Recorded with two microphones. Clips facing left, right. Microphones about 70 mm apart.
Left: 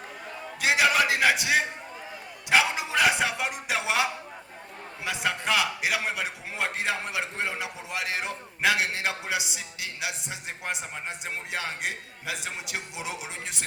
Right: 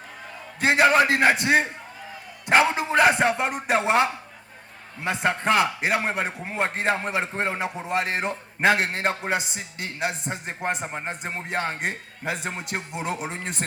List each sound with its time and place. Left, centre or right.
0.6 s a man's voice: right